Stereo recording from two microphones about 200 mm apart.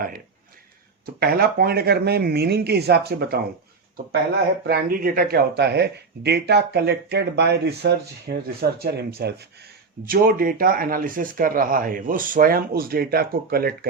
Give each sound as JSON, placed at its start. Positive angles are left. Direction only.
{"t": 1.0, "sound": "speech", "side_deg": -50}
{"t": 4.6, "sound": "speech", "side_deg": -50}